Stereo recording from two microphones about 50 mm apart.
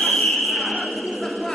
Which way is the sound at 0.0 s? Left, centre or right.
Centre.